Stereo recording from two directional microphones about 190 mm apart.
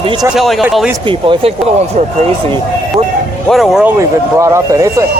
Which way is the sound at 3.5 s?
Centre (ahead or behind).